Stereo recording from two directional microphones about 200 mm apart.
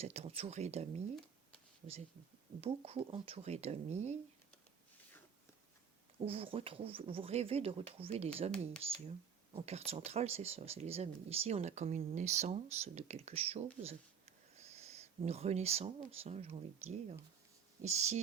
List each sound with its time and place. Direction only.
0.0 s speech: 30° right (ahead or behind)
2.6 s speech: 30° right (ahead or behind)
6.2 s speech: 30° right (ahead or behind)